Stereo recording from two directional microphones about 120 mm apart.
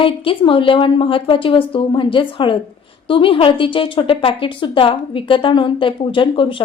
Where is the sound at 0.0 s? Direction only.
45° left (ahead or behind).